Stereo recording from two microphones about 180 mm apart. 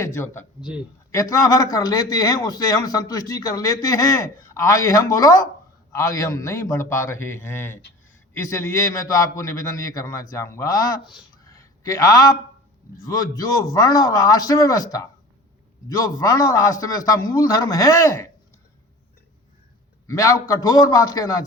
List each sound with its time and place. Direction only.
0.0 s a man's voice: 15° left (ahead or behind)
11.4 s a sound: 20° left (ahead or behind)
13.1 s speech: 20° left (ahead or behind)
16.1 s speech: 20° left (ahead or behind)
20.1 s a man's voice: 20° left (ahead or behind)